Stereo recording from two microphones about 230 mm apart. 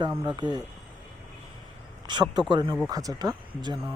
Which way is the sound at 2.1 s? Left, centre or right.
Centre.